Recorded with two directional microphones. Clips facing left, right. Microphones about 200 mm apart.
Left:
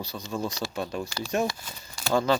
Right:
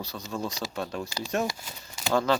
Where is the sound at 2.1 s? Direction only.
Centre (ahead or behind).